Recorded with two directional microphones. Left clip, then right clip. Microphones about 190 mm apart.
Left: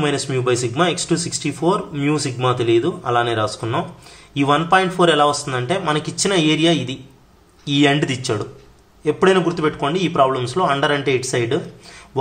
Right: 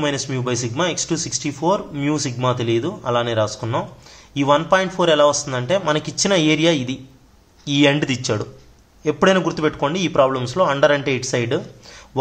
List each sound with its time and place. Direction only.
0.0 s speech: 20° right (ahead or behind)